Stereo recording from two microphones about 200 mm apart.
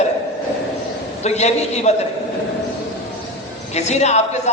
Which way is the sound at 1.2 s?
35° left (ahead or behind).